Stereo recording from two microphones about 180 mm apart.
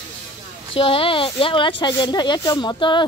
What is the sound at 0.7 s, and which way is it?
Speech, 30° left (ahead or behind).